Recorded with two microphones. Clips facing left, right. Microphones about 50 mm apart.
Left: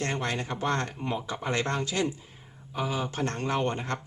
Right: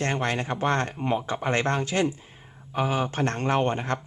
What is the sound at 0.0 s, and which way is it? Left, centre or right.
A man's voice, right.